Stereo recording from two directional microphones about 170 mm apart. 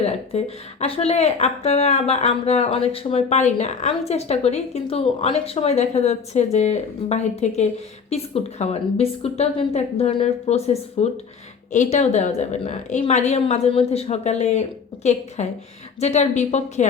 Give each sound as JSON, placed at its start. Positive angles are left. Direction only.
{"t": 0.0, "sound": "speech", "side_deg": 40}